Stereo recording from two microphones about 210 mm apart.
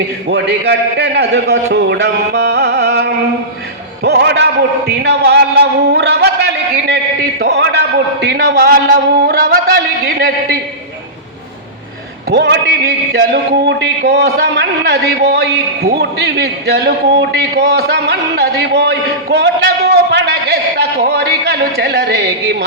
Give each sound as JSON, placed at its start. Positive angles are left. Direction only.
{"t": 0.3, "sound": "a man's voice", "side_deg": -50}
{"t": 12.3, "sound": "a man's voice", "side_deg": -55}